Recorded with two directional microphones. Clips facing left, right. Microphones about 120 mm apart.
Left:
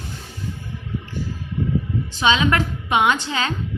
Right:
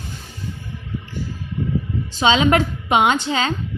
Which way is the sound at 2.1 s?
25° right (ahead or behind).